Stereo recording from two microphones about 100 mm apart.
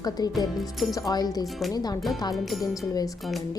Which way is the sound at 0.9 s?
40° left (ahead or behind).